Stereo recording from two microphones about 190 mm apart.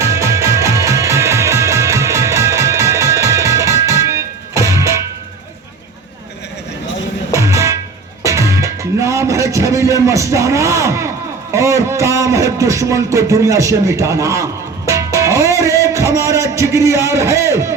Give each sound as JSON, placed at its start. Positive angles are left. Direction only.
{"t": 0.0, "sound": "music", "side_deg": -15}
{"t": 7.3, "sound": "music", "side_deg": -15}
{"t": 11.5, "sound": "speech", "side_deg": -15}